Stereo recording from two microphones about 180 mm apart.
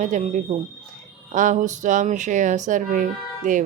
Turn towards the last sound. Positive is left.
turn(degrees=-45)  # may be behind; listen again after turning